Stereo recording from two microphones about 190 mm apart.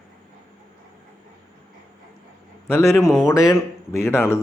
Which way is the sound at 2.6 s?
15° left (ahead or behind).